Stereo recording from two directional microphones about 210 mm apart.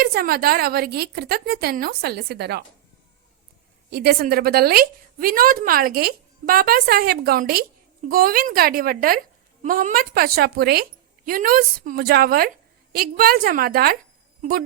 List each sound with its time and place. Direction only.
0.0 s a woman's voice: 45° right (ahead or behind)
3.8 s a woman's voice: 50° right (ahead or behind)